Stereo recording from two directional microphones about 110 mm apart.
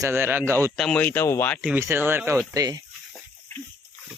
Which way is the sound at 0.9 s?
20° left (ahead or behind).